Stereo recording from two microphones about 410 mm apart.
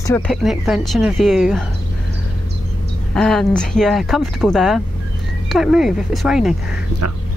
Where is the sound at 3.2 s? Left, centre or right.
Centre.